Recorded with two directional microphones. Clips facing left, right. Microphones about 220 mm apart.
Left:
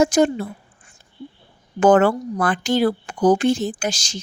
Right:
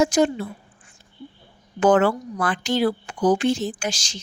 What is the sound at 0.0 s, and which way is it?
Speech, 50° left (ahead or behind).